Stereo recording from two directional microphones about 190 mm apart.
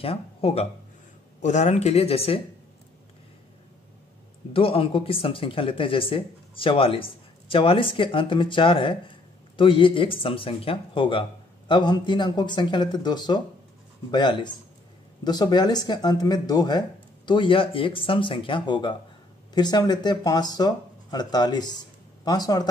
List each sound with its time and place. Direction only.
0.0 s speech: 30° left (ahead or behind)
4.5 s speech: 30° left (ahead or behind)